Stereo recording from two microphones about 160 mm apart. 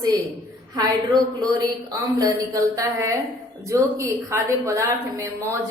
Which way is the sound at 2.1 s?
20° right (ahead or behind).